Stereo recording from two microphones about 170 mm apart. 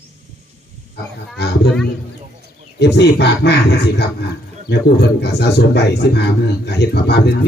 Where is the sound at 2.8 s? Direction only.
75° left (ahead or behind).